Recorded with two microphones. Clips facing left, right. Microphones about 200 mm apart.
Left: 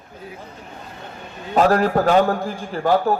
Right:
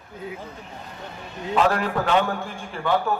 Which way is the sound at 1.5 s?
40° left (ahead or behind).